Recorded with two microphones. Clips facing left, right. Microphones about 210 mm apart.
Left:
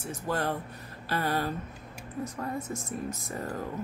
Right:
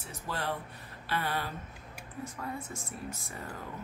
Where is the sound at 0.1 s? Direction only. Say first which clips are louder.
Left 5 dB; 45° left (ahead or behind).